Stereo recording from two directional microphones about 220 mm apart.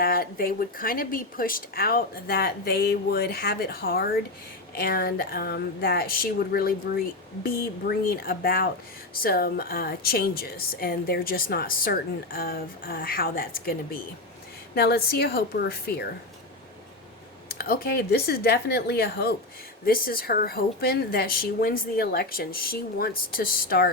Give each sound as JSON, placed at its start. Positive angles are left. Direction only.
{"t": 0.0, "sound": "a woman's voice", "side_deg": 40}
{"t": 17.6, "sound": "a woman's voice", "side_deg": 45}